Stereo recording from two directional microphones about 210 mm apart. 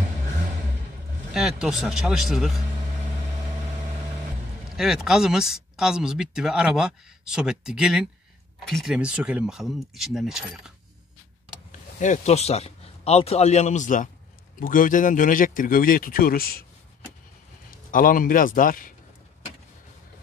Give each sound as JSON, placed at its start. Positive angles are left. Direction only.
{"t": 1.3, "sound": "speech", "side_deg": 0}
{"t": 4.7, "sound": "speech", "side_deg": 0}
{"t": 12.0, "sound": "a man's voice", "side_deg": 35}
{"t": 17.9, "sound": "a man's voice", "side_deg": 40}